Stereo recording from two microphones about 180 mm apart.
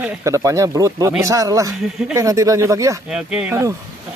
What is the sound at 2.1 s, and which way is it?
Speech, 15° right (ahead or behind).